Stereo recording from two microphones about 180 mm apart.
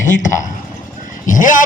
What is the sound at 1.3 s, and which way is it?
Speech, 45° left (ahead or behind).